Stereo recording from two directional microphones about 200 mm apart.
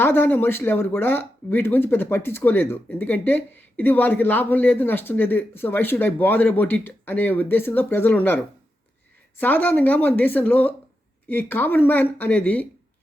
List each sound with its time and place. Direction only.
0.0 s speech: 10° left (ahead or behind)
9.4 s speech: 10° left (ahead or behind)